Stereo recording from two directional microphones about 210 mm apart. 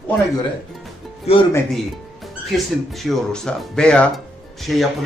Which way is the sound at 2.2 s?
Centre (ahead or behind).